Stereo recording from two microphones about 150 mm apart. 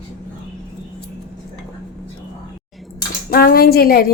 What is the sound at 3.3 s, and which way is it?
Speech, 90° left.